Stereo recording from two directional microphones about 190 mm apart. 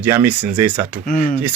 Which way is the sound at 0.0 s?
10° right (ahead or behind).